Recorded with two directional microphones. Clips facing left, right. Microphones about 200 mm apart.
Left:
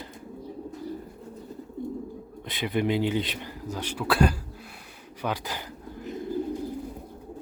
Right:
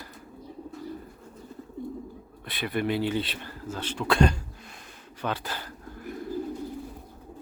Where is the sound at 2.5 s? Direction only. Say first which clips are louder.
Left 2 dB; 20° left (ahead or behind).